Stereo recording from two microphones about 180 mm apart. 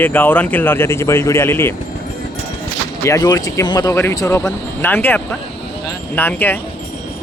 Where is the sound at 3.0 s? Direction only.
20° left (ahead or behind).